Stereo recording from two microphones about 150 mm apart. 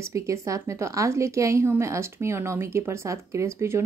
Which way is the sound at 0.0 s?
20° right (ahead or behind).